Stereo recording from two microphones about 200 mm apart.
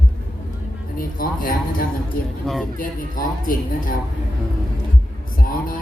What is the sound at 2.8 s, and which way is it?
A man's voice, 45° left (ahead or behind).